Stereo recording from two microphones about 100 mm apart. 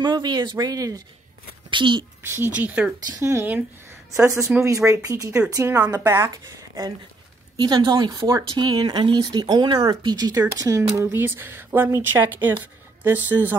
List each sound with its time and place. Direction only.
0.0 s speech: 50° right (ahead or behind)
1.7 s speech: 55° right (ahead or behind)
2.2 s speech: 25° right (ahead or behind)
2.5 s speech: 15° right (ahead or behind)
3.2 s speech: 25° right (ahead or behind)
4.6 s speech: 30° right (ahead or behind)
7.5 s speech: 50° right (ahead or behind)
8.1 s speech: 35° right (ahead or behind)
11.0 s speech: 25° right (ahead or behind)